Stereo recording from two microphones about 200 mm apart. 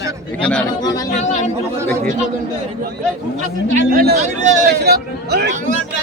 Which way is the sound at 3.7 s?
45° right (ahead or behind).